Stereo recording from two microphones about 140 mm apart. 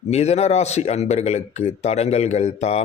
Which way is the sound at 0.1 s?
50° left (ahead or behind).